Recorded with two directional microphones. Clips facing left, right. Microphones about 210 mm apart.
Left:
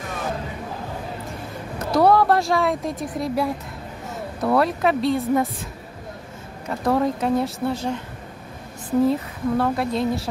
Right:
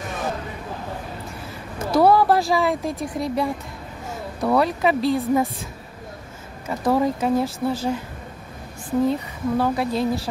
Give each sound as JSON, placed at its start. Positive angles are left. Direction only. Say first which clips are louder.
{"t": 1.8, "sound": "speech", "louder": "right 1 dB", "side_deg": 0}
{"t": 6.7, "sound": "speech", "louder": "right 1 dB", "side_deg": -5}
{"t": 9.0, "sound": "speech", "louder": "left 1 dB", "side_deg": 0}